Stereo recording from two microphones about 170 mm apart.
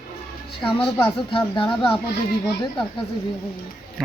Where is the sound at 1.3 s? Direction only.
30° left (ahead or behind).